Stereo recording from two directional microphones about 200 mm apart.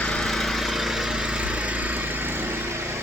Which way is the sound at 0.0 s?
Centre (ahead or behind).